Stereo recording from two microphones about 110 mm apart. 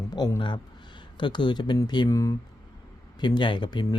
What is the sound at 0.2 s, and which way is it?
Speech, 40° left (ahead or behind).